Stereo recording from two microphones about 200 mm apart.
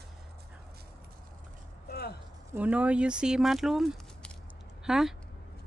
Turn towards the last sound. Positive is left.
turn(degrees=0)  # may be behind; listen again after turning